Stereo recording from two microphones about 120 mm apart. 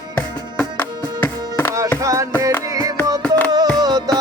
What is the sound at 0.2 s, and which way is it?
Music, 15° left (ahead or behind).